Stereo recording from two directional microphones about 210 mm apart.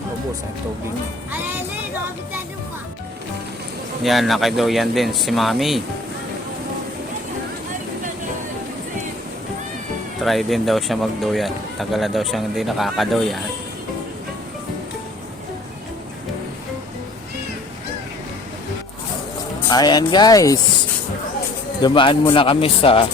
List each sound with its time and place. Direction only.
4.0 s speech: centre (ahead or behind)
10.2 s speech: centre (ahead or behind)
19.6 s speech: 20° left (ahead or behind)
21.8 s speech: 20° left (ahead or behind)